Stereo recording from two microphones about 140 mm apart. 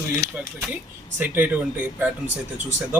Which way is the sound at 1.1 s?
10° right (ahead or behind).